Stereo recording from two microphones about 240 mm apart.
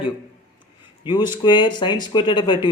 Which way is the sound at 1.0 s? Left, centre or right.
Centre.